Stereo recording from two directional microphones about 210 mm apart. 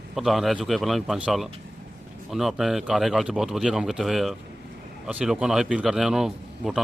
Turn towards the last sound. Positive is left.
turn(degrees=0)  # may be behind; listen again after turning